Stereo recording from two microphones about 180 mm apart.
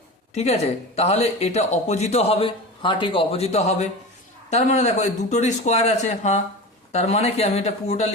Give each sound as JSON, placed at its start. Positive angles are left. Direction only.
{"t": 0.3, "sound": "speech", "side_deg": 35}